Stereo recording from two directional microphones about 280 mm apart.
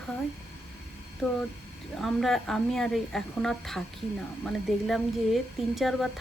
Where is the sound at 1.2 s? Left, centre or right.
Centre.